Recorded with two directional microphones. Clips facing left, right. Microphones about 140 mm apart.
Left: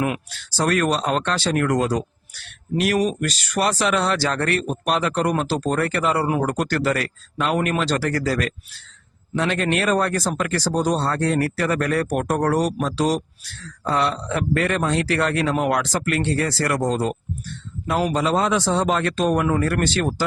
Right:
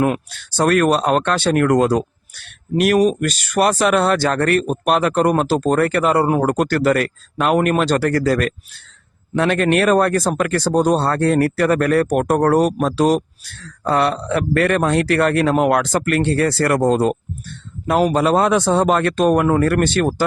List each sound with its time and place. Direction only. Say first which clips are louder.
0.5 s speech: right 5 dB; 55° right (ahead or behind)